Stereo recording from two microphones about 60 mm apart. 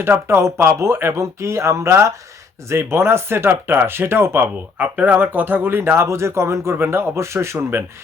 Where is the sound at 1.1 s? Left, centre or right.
Right.